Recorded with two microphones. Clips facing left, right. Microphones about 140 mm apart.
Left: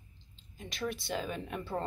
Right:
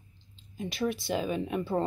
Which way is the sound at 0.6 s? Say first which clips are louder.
Right 6 dB; 10° right (ahead or behind).